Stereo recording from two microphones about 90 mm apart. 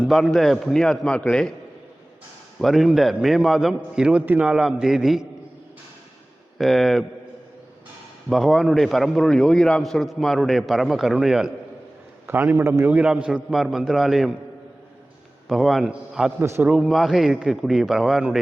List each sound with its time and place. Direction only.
0.1 s a man's voice: centre (ahead or behind)
2.6 s a man's voice: centre (ahead or behind)
6.6 s a man's voice: centre (ahead or behind)
8.3 s a man's voice: centre (ahead or behind)
12.2 s a man's voice: 25° right (ahead or behind)
12.9 s a man's voice: 10° right (ahead or behind)
15.4 s a man's voice: centre (ahead or behind)
16.4 s a man's voice: 25° right (ahead or behind)
16.6 s a man's voice: 5° right (ahead or behind)